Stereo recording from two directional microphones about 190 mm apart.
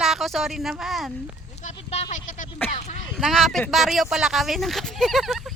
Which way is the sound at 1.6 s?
35° left (ahead or behind).